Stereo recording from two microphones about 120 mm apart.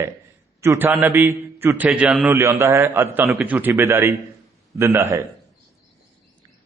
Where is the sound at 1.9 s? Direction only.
Centre (ahead or behind).